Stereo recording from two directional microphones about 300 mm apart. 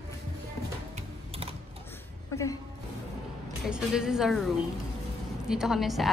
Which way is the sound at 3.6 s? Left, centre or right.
Centre.